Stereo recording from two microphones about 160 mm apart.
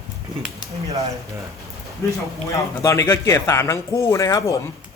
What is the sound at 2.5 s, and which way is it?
Speech, 20° left (ahead or behind).